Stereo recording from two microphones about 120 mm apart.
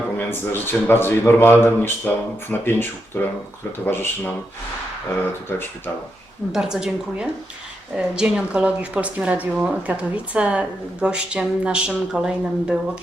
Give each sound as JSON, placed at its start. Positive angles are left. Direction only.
{"t": 0.2, "sound": "speech", "side_deg": 20}
{"t": 6.5, "sound": "a woman's voice", "side_deg": -5}